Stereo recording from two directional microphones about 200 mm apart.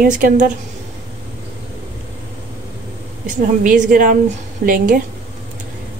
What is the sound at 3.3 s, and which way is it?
A woman's voice, 40° right (ahead or behind).